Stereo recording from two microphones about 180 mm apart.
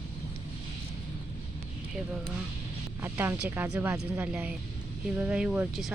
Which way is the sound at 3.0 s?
10° right (ahead or behind).